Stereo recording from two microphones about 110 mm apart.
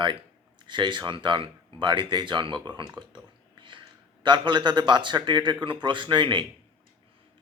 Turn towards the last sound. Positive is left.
turn(degrees=-45)  # may be behind; listen again after turning